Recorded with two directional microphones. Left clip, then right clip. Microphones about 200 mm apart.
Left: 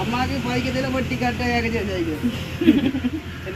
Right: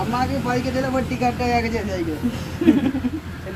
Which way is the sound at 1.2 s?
Centre (ahead or behind).